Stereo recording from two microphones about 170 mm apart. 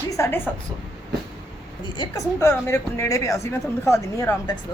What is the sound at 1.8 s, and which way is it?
A woman's voice, 25° left (ahead or behind).